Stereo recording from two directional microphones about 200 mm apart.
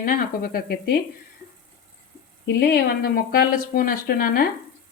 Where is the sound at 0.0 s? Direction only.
45° left (ahead or behind).